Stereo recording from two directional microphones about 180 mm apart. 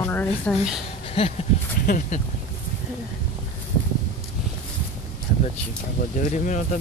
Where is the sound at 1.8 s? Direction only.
45° left (ahead or behind).